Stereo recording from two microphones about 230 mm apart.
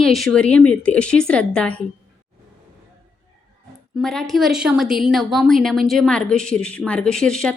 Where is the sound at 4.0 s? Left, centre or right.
Centre.